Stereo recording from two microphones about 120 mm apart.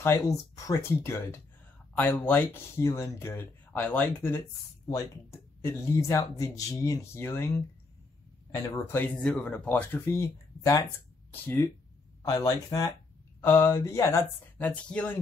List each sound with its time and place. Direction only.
0.0 s speech: 25° left (ahead or behind)
11.4 s speech: 15° left (ahead or behind)
12.2 s speech: 25° left (ahead or behind)
14.6 s speech: 10° left (ahead or behind)